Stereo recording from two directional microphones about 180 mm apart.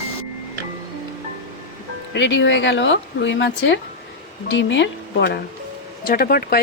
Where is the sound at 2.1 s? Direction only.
85° left.